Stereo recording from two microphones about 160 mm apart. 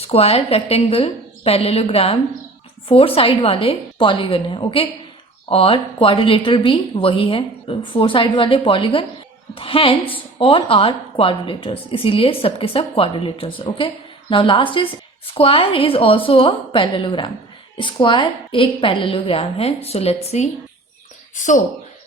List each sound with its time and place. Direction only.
0.0 s a woman's voice: 40° left (ahead or behind)
3.2 s a woman's voice: 35° left (ahead or behind); by 21.6 s 50° left (ahead or behind)